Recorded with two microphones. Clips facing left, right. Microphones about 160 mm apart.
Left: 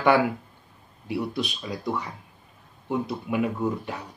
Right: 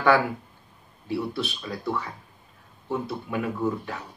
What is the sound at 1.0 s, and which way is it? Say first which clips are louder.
Speech: even; 15° left (ahead or behind).